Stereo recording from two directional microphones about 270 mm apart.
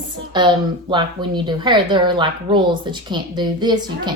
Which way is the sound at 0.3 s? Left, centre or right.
Centre.